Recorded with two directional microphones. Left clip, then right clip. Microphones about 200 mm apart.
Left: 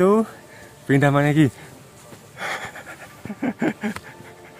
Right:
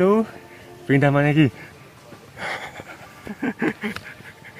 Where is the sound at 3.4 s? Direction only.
30° left (ahead or behind).